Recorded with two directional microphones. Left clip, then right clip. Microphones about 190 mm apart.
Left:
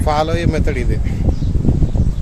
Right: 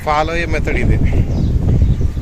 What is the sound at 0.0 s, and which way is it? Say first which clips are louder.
Speech: right 1 dB; 15° left (ahead or behind).